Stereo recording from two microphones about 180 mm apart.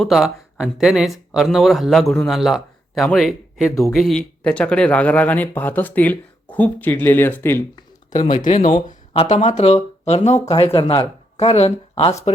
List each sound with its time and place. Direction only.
0.0 s speech: centre (ahead or behind)
8.1 s speech: 25° left (ahead or behind)
8.9 s speech: 40° left (ahead or behind)